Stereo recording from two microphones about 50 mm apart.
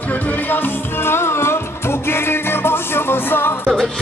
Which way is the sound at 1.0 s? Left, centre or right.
Left.